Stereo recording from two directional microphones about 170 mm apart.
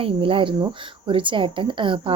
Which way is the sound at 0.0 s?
30° right (ahead or behind).